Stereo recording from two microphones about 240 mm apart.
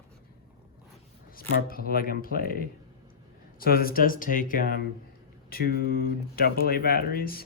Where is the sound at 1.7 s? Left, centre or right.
Left.